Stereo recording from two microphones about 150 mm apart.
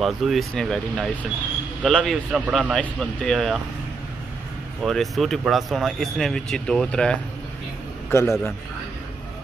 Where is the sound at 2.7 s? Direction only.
5° left (ahead or behind).